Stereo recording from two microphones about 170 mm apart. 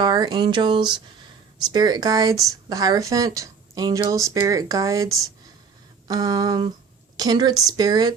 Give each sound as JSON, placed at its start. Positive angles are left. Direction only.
{"t": 0.0, "sound": "speech", "side_deg": -25}